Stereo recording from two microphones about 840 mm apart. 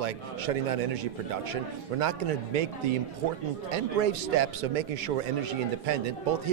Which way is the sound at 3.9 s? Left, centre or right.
Right.